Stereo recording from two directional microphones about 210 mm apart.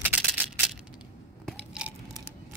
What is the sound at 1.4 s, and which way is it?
Biting, 5° right (ahead or behind).